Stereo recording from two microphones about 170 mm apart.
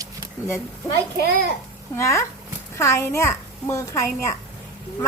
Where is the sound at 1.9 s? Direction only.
15° left (ahead or behind).